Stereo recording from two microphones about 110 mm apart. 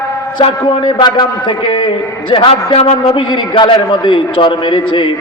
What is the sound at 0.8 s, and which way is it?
A man's voice, 40° left (ahead or behind).